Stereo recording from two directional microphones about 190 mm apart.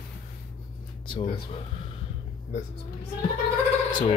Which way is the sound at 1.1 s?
30° left (ahead or behind).